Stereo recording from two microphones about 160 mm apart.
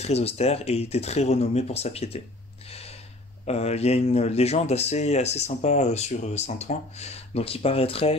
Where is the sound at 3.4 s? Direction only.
40° left (ahead or behind).